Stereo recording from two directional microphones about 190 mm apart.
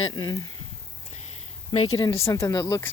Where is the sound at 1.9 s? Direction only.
15° left (ahead or behind).